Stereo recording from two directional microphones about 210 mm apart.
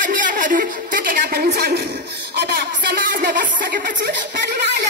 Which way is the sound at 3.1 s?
40° right (ahead or behind).